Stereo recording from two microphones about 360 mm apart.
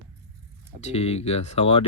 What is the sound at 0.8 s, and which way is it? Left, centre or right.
Speech, centre.